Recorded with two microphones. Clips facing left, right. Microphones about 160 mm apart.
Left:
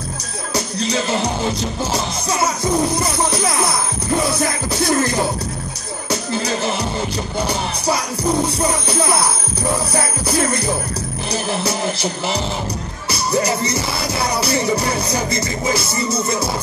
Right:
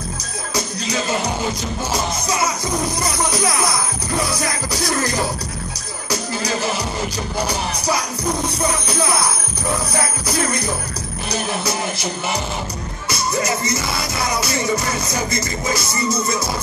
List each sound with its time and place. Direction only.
1.9 s music: 30° left (ahead or behind)
11.6 s music: 30° left (ahead or behind)